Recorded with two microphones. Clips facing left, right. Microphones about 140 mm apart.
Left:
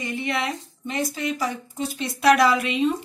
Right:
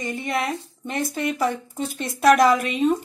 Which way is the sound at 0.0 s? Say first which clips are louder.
Right 1 dB; 45° right (ahead or behind).